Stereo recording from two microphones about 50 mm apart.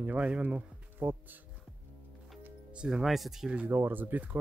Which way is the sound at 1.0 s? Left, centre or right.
Right.